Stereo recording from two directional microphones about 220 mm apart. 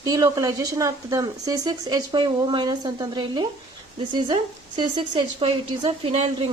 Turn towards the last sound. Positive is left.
turn(degrees=-25)  # may be behind; listen again after turning